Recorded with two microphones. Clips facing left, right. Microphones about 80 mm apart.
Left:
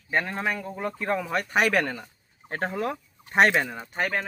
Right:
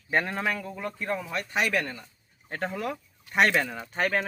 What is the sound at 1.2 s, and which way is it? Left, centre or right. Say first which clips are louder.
Speech: left 6 dB; left.